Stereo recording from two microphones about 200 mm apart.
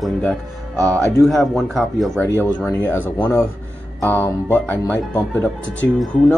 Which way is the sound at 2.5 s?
10° left (ahead or behind).